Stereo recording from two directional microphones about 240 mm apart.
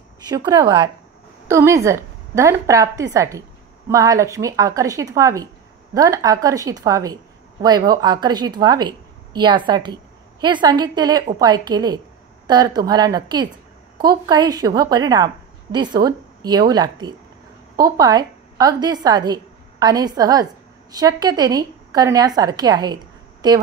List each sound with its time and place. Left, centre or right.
0.3 s a woman's voice: centre